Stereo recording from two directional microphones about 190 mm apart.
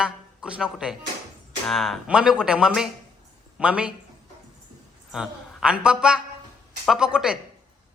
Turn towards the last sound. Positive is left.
turn(degrees=-5)  # may be behind; listen again after turning